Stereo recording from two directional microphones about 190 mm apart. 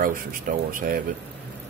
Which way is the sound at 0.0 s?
45° right (ahead or behind).